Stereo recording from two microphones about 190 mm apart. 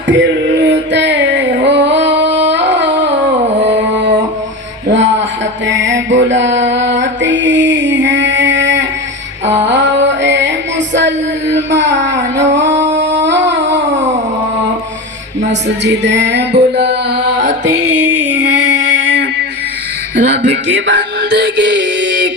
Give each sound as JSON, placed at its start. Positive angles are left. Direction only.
{"t": 0.1, "sound": "music", "side_deg": -70}
{"t": 4.9, "sound": "a sound", "side_deg": -70}
{"t": 5.6, "sound": "music", "side_deg": -70}
{"t": 13.0, "sound": "a sound", "side_deg": -70}
{"t": 15.4, "sound": "music", "side_deg": -70}
{"t": 20.1, "sound": "music", "side_deg": -70}